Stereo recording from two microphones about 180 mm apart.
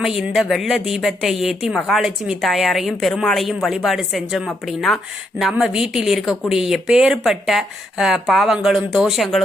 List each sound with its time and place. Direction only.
0.0 s speech: centre (ahead or behind)